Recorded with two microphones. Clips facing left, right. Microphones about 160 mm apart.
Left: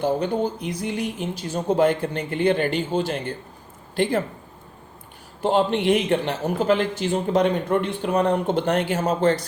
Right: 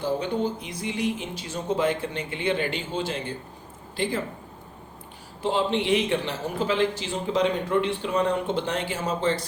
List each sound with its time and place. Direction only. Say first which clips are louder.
0.0 s a man's voice: left 4 dB; 50° left (ahead or behind)
5.4 s a man's voice: left 4 dB; 55° left (ahead or behind)